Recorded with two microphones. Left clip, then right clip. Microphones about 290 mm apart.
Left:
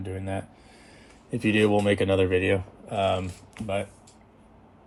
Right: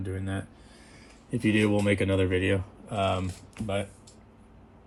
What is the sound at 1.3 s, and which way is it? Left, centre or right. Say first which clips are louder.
Speech: left 3 dB; left.